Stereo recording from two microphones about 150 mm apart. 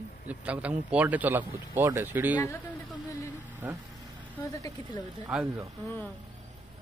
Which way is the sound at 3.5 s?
10° right (ahead or behind).